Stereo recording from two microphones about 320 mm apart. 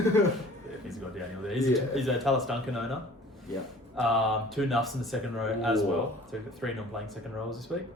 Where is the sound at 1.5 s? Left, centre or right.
Centre.